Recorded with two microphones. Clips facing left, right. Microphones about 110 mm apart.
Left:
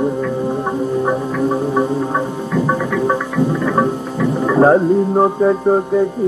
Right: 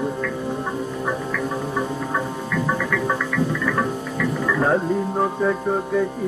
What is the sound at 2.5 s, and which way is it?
Music, 25° left (ahead or behind).